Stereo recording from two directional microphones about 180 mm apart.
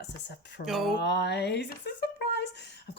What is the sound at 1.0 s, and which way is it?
Speech, 70° left (ahead or behind).